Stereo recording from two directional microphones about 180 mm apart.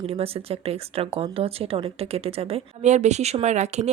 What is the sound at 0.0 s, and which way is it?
A woman's voice, 35° right (ahead or behind).